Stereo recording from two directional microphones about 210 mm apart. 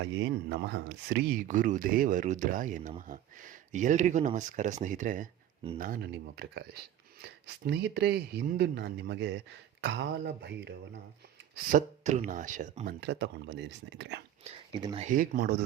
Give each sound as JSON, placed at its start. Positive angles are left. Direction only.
{"t": 0.0, "sound": "speech", "side_deg": -60}
{"t": 1.4, "sound": "speech", "side_deg": -40}
{"t": 11.5, "sound": "speech", "side_deg": -35}
{"t": 14.8, "sound": "speech", "side_deg": -20}
{"t": 15.0, "sound": "speech", "side_deg": -40}